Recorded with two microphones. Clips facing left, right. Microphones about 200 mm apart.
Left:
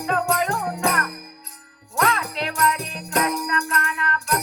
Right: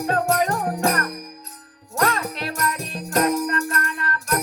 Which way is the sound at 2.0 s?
40° right (ahead or behind).